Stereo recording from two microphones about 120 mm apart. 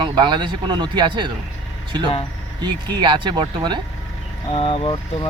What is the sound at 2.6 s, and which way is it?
Speech, 40° right (ahead or behind).